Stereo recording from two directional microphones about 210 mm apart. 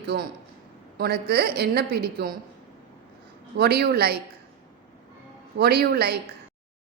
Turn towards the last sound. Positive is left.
turn(degrees=-50)  # may be behind; listen again after turning